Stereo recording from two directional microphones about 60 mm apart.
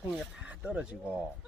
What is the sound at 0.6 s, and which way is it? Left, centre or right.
Speech, centre.